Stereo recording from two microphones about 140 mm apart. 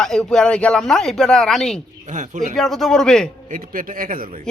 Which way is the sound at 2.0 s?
60° right (ahead or behind).